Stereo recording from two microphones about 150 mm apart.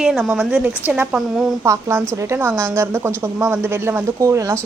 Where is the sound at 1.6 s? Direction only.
15° right (ahead or behind).